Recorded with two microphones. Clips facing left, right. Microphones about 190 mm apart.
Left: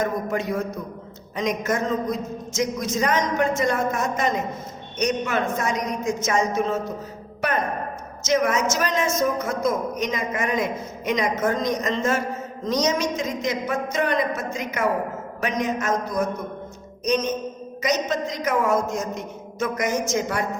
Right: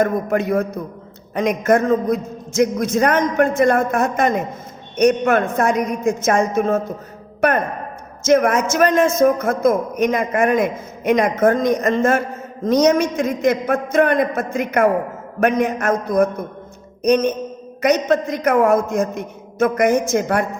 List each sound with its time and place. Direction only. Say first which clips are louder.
0.0 s a man's voice: right 6 dB; 55° right (ahead or behind)